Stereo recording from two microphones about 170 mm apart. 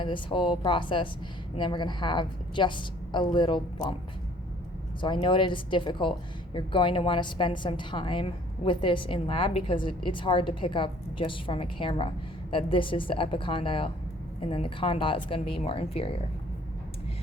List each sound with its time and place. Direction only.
0.0 s a woman's voice: 30° left (ahead or behind)
4.9 s a woman's voice: 30° left (ahead or behind)